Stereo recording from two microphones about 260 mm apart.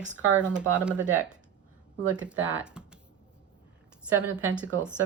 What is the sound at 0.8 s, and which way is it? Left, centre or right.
A woman's voice, centre.